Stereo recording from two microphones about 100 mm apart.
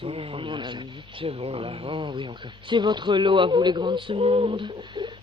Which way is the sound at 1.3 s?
70° right (ahead or behind).